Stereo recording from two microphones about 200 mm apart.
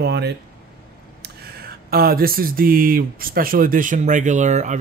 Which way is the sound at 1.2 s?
50° right (ahead or behind).